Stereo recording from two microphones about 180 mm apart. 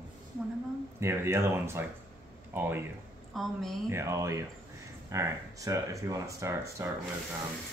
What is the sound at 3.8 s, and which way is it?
Speech, 15° right (ahead or behind).